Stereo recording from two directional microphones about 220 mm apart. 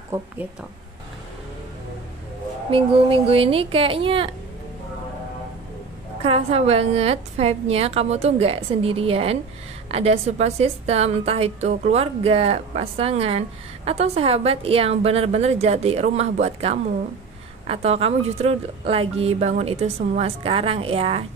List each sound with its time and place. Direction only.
0.1 s speech: 10° right (ahead or behind)
2.7 s a woman's voice: 25° right (ahead or behind)
6.2 s a woman's voice: 30° right (ahead or behind)